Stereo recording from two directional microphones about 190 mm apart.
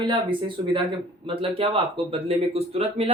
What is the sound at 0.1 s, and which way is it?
Speech, 25° right (ahead or behind).